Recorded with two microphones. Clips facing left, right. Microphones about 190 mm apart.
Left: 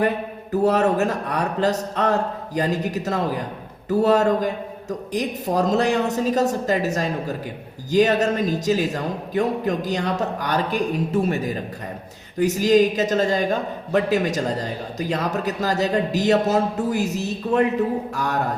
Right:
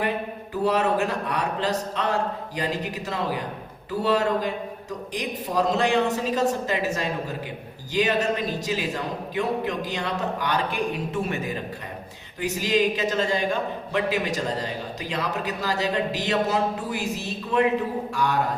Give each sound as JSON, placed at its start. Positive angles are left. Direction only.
{"t": 0.5, "sound": "a woman's voice", "side_deg": 45}
{"t": 12.4, "sound": "a woman's voice", "side_deg": 45}
{"t": 18.1, "sound": "a woman's voice", "side_deg": 45}